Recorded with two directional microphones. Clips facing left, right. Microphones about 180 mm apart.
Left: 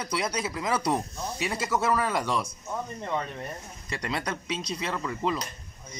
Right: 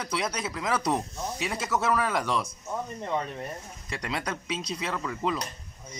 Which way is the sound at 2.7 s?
10° right (ahead or behind).